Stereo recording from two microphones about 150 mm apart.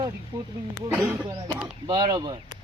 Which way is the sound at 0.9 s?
10° right (ahead or behind).